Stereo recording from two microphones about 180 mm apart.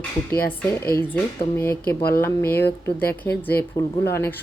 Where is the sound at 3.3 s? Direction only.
60° left (ahead or behind).